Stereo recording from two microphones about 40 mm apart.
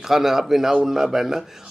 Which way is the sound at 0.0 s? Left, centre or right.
Centre.